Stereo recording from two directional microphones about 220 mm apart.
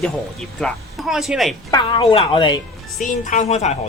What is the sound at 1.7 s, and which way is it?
Speech, 20° left (ahead or behind).